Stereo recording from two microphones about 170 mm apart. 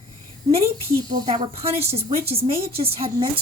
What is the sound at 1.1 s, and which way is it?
A woman's voice, 25° right (ahead or behind).